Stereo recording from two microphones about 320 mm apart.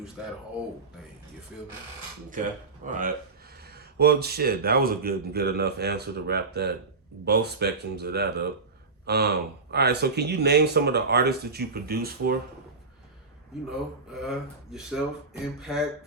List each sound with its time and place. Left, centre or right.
1.5 s speech: centre
2.8 s speech: right
13.7 s speech: centre